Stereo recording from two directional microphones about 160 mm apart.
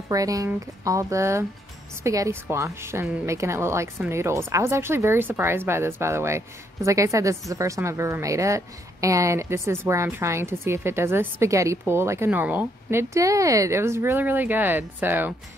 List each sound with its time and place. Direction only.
0.1 s speech: 20° right (ahead or behind)